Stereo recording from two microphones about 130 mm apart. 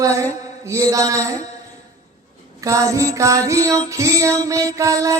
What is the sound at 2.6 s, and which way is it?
Speech, 25° right (ahead or behind).